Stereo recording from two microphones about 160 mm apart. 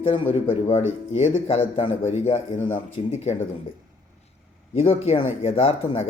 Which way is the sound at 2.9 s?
45° left (ahead or behind).